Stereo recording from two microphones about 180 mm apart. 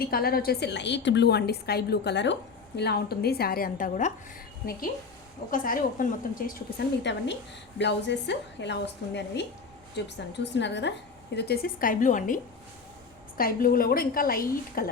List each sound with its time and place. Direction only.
0.0 s a woman's voice: 55° left (ahead or behind)
5.5 s a woman's voice: 50° left (ahead or behind)
7.0 s a woman's voice: 75° left (ahead or behind); by 14.8 s 55° left (ahead or behind)